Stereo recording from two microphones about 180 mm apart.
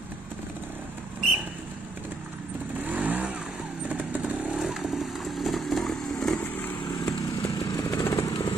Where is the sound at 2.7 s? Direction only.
10° right (ahead or behind); by 6.7 s 10° left (ahead or behind).